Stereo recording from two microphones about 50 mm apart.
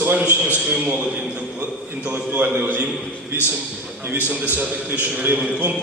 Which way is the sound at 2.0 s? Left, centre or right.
Right.